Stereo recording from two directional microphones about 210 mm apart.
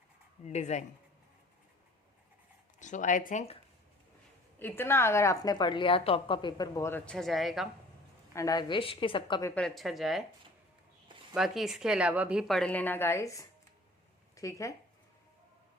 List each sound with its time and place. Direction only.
0.4 s speech: 35° left (ahead or behind)
2.7 s speech: 35° left (ahead or behind)
4.6 s a woman's voice: 10° left (ahead or behind)
8.4 s a woman's voice: 20° left (ahead or behind)
9.6 s a woman's voice: centre (ahead or behind)
11.3 s a woman's voice: centre (ahead or behind); by 14.8 s 15° left (ahead or behind)